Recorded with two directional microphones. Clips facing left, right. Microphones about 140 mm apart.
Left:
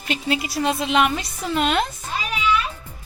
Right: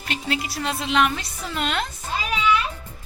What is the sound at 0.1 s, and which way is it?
A woman's voice, 15° left (ahead or behind).